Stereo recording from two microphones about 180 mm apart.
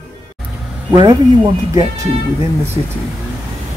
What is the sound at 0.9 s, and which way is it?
Speech, 20° right (ahead or behind).